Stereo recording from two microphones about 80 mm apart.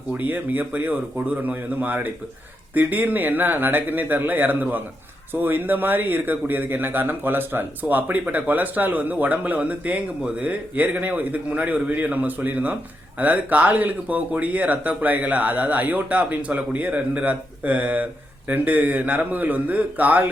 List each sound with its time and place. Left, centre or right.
0.1 s speech: right